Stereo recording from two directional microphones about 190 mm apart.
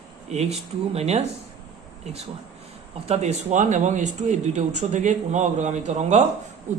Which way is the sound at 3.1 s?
35° right (ahead or behind).